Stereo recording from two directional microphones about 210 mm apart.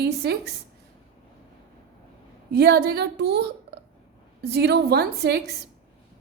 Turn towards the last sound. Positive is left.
turn(degrees=-50)  # may be behind; listen again after turning